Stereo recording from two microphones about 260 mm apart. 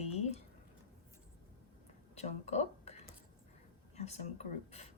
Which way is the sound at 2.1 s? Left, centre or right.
Left.